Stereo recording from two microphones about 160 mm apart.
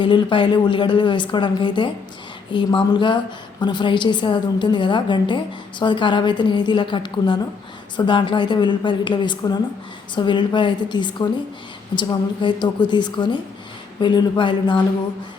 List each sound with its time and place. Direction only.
0.0 s a woman's voice: 30° left (ahead or behind)